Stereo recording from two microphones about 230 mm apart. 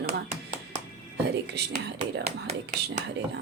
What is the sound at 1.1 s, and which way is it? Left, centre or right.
Speech, right.